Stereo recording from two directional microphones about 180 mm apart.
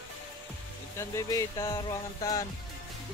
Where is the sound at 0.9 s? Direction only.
20° left (ahead or behind).